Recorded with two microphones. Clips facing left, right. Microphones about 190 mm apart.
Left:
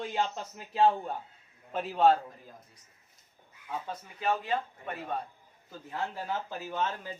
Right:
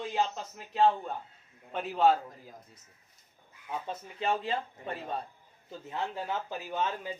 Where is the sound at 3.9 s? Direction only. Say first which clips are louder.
Even; 25° right (ahead or behind).